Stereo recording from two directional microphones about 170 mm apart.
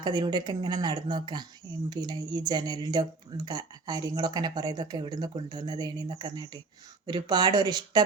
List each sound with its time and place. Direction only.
0.0 s speech: 25° right (ahead or behind)